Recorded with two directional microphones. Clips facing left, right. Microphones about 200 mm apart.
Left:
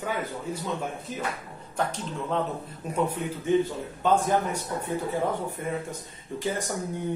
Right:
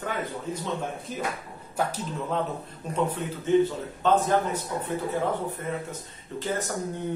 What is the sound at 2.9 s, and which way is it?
Speech, 10° left (ahead or behind).